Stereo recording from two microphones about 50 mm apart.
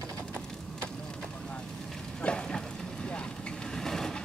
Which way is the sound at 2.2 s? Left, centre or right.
Centre.